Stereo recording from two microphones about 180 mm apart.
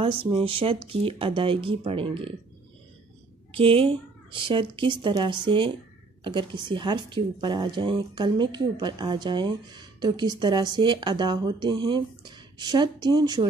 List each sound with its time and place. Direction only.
0.0 s speech: 30° right (ahead or behind)
3.5 s speech: 30° right (ahead or behind)